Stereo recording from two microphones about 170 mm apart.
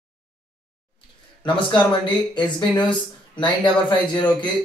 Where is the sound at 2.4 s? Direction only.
25° left (ahead or behind).